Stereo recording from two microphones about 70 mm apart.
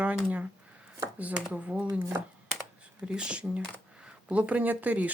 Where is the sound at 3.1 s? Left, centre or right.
Centre.